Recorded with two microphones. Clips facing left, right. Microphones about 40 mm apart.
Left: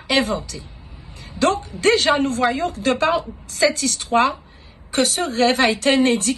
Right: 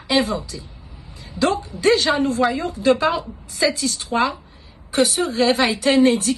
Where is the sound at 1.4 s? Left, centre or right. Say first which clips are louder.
Left 1 dB; left.